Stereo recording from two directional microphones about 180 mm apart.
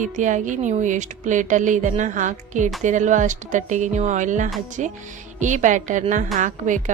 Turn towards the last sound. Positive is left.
turn(degrees=-45)  # may be behind; listen again after turning